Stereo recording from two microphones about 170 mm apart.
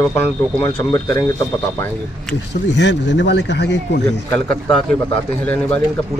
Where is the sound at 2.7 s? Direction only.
90° left.